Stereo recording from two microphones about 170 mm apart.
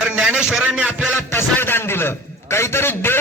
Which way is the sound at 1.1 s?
15° left (ahead or behind).